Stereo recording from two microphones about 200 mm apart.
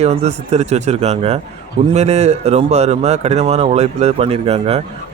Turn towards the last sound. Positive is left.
turn(degrees=-30)  # may be behind; listen again after turning